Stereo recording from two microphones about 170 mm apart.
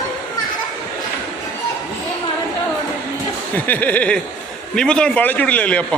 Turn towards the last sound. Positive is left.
turn(degrees=10)  # may be behind; listen again after turning